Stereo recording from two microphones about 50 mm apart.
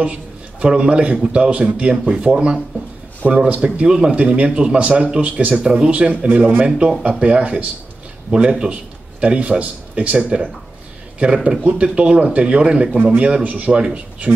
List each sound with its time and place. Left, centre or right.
0.0 s a man's voice: right
4.1 s a man's voice: right
4.5 s speech: centre
4.7 s a man's voice: right
6.2 s speech: right
7.0 s a man's voice: right